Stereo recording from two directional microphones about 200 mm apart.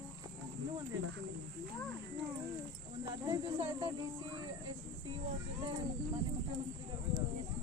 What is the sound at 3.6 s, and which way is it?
Speech, 25° right (ahead or behind).